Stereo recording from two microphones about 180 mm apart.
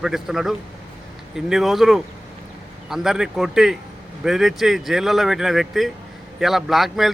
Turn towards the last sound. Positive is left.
turn(degrees=0)  # may be behind; listen again after turning